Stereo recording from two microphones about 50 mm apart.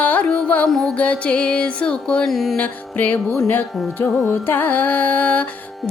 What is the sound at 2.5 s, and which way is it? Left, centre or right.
Music, left.